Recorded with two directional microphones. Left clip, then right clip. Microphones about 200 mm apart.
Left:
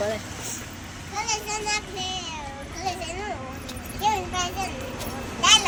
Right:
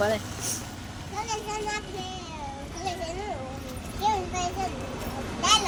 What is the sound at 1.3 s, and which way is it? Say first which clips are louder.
Music: left 4 dB; 45° left (ahead or behind).